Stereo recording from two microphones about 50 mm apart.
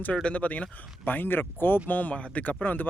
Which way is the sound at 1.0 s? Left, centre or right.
Left.